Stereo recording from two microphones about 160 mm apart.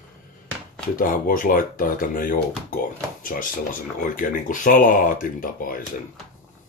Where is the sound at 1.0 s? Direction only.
60° left (ahead or behind).